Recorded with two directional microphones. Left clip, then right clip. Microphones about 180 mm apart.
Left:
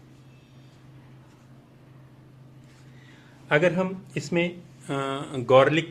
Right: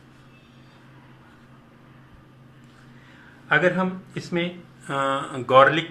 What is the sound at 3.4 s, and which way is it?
Speech, 90° left.